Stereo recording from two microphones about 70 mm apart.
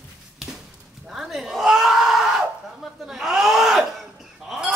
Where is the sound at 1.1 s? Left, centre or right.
Centre.